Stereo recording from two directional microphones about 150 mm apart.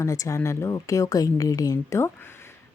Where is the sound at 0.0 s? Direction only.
20° left (ahead or behind).